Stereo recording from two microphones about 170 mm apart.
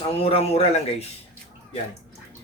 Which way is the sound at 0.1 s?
35° left (ahead or behind).